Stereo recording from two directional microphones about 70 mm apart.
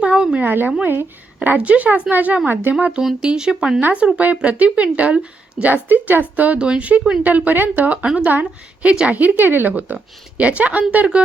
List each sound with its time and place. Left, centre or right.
0.0 s a sound: centre
0.4 s a woman's voice: right
1.4 s a woman's voice: centre
3.0 s speech: centre
3.8 s a woman's voice: right
5.7 s a woman's voice: right